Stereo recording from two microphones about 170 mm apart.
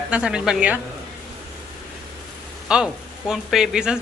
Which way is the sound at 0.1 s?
5° right (ahead or behind).